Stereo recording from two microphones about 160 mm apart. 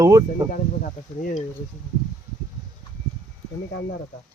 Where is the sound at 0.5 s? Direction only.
60° left (ahead or behind).